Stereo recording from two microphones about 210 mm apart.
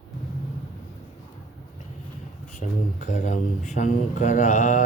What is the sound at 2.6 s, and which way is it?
Speech, 35° left (ahead or behind).